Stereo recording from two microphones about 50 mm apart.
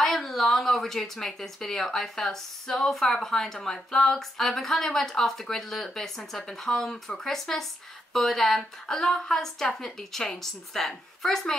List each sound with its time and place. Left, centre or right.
0.0 s speech: centre